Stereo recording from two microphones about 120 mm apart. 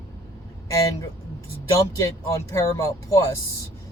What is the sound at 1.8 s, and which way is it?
Speech, 25° left (ahead or behind).